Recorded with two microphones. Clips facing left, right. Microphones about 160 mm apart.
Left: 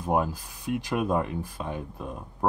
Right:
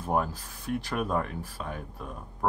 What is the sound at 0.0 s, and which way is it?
Speech, 15° left (ahead or behind).